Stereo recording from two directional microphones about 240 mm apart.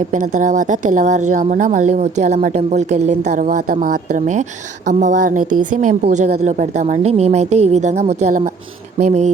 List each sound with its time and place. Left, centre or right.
0.1 s a woman's voice: right